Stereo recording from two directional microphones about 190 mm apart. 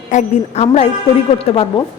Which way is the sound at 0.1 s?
40° left (ahead or behind).